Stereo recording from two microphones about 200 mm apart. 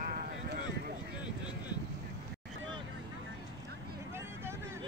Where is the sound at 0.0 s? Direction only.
40° right (ahead or behind).